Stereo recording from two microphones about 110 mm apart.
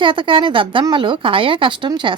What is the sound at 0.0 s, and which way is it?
A woman's voice, 50° right (ahead or behind).